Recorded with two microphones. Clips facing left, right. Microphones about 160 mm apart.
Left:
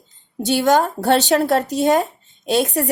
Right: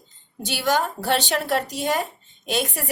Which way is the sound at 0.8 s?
40° left (ahead or behind).